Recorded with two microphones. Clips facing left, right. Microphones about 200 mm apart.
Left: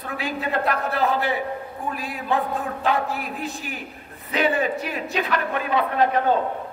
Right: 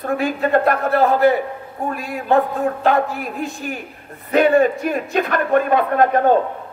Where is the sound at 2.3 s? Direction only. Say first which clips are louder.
Right 8 dB; 55° right (ahead or behind).